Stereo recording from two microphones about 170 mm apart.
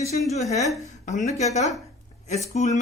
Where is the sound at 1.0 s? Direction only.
45° left (ahead or behind).